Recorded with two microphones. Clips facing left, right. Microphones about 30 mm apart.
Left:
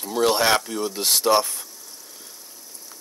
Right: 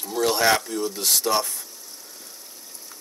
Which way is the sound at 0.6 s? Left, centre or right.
Centre.